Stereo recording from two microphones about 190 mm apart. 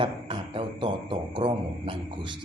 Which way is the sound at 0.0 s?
25° right (ahead or behind).